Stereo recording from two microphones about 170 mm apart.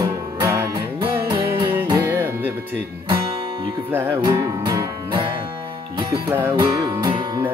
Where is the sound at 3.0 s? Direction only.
30° right (ahead or behind).